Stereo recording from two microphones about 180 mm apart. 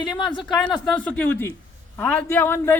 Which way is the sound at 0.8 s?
5° left (ahead or behind).